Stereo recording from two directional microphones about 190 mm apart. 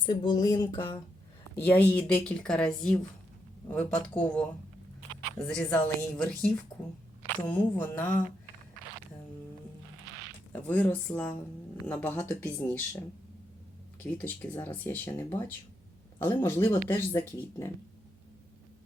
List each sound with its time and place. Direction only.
0.0 s a sound: 25° left (ahead or behind)
1.5 s speech: 10° left (ahead or behind)
5.5 s a woman's voice: 5° left (ahead or behind)
10.5 s speech: 10° left (ahead or behind)